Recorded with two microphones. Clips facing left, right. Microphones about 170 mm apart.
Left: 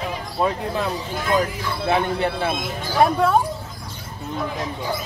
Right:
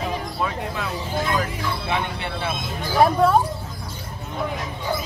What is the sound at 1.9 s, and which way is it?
Speech, 40° left (ahead or behind).